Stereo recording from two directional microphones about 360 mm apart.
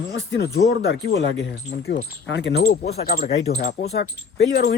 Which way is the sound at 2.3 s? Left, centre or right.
Left.